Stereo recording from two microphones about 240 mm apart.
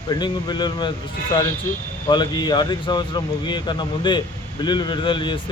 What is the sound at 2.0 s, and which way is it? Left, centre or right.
A man's voice, centre.